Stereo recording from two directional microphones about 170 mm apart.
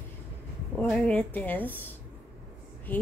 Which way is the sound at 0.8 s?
5° left (ahead or behind).